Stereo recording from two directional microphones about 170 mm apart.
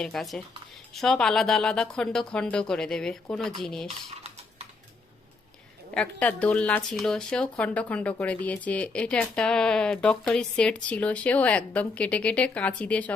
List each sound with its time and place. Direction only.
0.0 s speech: centre (ahead or behind)
3.8 s dishes: 40° right (ahead or behind)
5.9 s speech: 5° left (ahead or behind)